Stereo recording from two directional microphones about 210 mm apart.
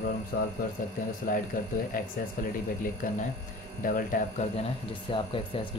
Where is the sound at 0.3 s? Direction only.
50° left (ahead or behind).